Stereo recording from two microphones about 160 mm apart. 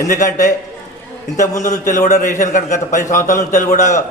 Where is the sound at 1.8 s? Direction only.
50° left (ahead or behind).